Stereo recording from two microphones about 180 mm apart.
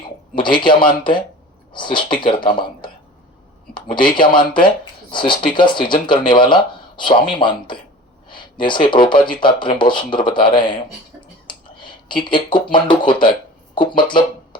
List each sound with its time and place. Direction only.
0.3 s speech: 25° left (ahead or behind)
3.8 s speech: 25° left (ahead or behind)